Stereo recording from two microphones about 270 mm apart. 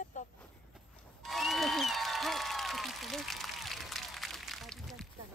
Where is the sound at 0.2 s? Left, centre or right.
Left.